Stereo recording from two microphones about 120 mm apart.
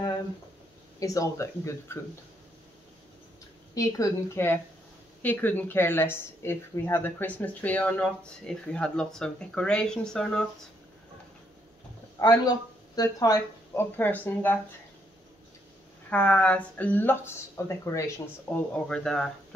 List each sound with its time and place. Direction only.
0.9 s a woman's voice: 30° left (ahead or behind)
3.7 s a woman's voice: 30° left (ahead or behind); by 10.4 s 5° left (ahead or behind)
12.2 s speech: 30° left (ahead or behind)
13.9 s a woman's voice: 15° left (ahead or behind)
16.1 s a woman's voice: 10° left (ahead or behind)
18.9 s a woman's voice: 5° left (ahead or behind)